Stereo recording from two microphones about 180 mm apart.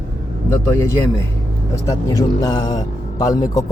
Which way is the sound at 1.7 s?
20° left (ahead or behind).